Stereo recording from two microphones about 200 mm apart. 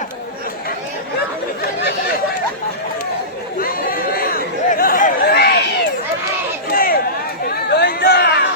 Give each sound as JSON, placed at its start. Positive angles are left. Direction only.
{"t": 3.6, "sound": "chatter", "side_deg": 45}
{"t": 6.7, "sound": "a sound", "side_deg": 45}
{"t": 7.8, "sound": "chatter", "side_deg": 50}